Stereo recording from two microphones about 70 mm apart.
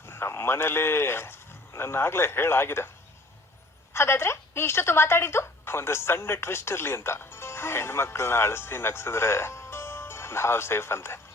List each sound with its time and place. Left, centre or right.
0.0 s speech: left
3.9 s a woman's voice: left